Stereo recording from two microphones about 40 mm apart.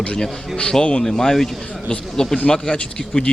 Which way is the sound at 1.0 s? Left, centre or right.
Centre.